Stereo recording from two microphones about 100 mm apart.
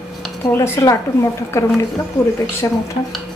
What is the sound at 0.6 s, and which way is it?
Speech, 30° left (ahead or behind).